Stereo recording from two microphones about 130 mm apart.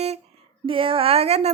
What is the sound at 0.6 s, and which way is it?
Child singing, 40° right (ahead or behind).